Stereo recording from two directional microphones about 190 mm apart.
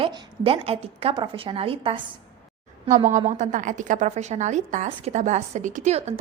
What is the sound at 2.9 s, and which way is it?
A woman's voice, 40° right (ahead or behind).